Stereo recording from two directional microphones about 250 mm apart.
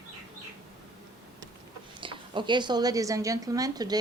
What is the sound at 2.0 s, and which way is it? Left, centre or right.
A woman's voice, centre.